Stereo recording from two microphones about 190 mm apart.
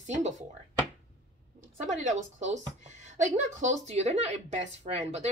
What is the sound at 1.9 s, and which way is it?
Speech, 40° right (ahead or behind).